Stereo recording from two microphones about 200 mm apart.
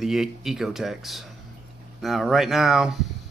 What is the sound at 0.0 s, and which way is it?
Speech, centre (ahead or behind).